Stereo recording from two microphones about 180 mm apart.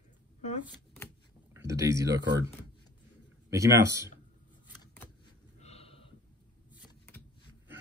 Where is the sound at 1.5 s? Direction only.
15° right (ahead or behind).